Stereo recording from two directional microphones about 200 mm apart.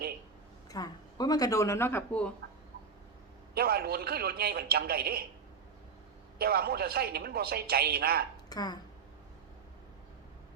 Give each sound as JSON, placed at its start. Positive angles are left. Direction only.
{"t": 0.7, "sound": "speech", "side_deg": 20}
{"t": 3.5, "sound": "speech", "side_deg": -50}
{"t": 6.4, "sound": "speech", "side_deg": -50}
{"t": 8.4, "sound": "speech", "side_deg": 20}